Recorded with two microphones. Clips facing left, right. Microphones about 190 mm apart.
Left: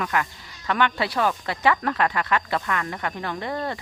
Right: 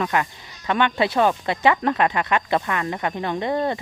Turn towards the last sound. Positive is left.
turn(degrees=-20)  # may be behind; listen again after turning